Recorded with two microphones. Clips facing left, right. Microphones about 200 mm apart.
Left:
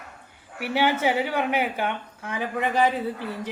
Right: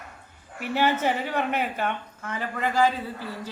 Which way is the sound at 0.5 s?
10° left (ahead or behind).